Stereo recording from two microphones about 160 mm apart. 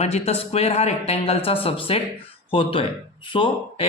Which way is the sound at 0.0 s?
40° left (ahead or behind).